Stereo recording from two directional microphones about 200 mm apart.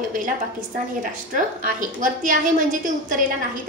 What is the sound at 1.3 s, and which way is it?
A woman's voice, 40° right (ahead or behind).